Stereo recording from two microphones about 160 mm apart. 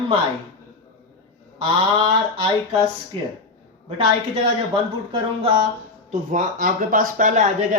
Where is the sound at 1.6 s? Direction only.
35° right (ahead or behind).